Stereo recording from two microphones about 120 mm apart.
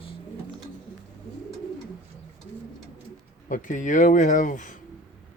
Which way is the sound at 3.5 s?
90° left.